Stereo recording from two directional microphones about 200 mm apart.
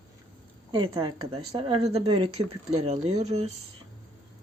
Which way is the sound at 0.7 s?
25° right (ahead or behind).